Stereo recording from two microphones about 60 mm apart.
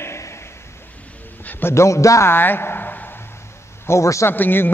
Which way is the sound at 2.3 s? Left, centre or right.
Left.